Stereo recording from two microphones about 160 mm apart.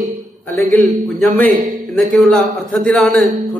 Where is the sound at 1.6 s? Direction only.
55° right (ahead or behind).